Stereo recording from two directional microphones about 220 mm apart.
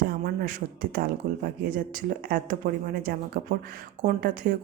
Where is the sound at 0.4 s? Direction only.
40° right (ahead or behind).